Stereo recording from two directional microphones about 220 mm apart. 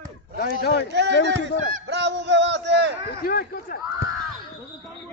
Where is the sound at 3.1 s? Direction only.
45° left (ahead or behind).